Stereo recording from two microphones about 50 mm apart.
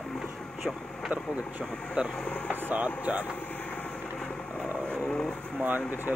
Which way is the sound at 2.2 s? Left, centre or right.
Left.